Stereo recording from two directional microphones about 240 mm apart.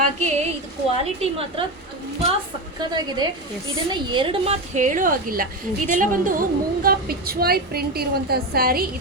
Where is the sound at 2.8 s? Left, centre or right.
Centre.